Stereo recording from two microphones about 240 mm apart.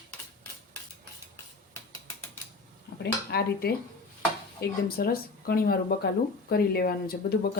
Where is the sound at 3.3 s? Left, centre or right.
Left.